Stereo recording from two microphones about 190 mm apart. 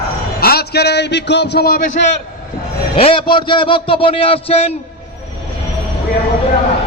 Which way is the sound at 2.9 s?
30° left (ahead or behind).